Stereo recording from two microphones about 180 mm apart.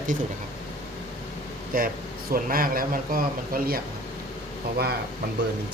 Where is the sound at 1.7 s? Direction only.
50° right (ahead or behind).